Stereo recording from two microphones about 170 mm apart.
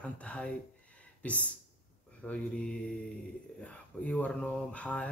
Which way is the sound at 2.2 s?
5° left (ahead or behind).